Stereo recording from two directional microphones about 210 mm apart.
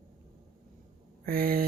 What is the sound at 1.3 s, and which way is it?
Speech, 45° right (ahead or behind).